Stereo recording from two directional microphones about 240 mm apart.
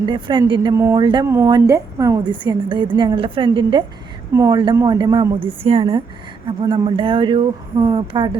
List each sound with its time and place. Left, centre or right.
0.0 s a woman's voice: centre